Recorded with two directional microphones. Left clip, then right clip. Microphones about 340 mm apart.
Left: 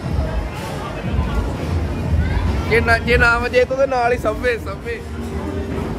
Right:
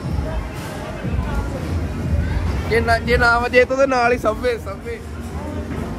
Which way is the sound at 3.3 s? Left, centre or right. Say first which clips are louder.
Right 1 dB; centre.